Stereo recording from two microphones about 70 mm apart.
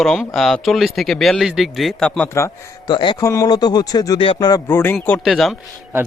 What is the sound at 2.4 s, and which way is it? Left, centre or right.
Speech, left.